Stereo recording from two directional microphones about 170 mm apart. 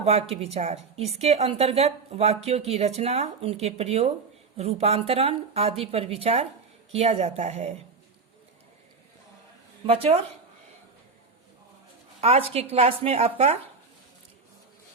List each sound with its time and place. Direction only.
0.0 s a woman's voice: 40° right (ahead or behind)
9.8 s a woman's voice: 35° right (ahead or behind)
12.2 s a woman's voice: 35° right (ahead or behind)